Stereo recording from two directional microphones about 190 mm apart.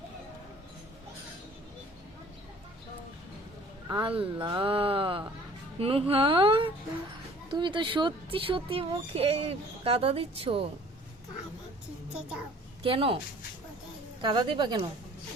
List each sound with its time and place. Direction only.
3.8 s speech: 25° right (ahead or behind)
12.8 s speech: 30° right (ahead or behind)
14.2 s speech: 25° right (ahead or behind)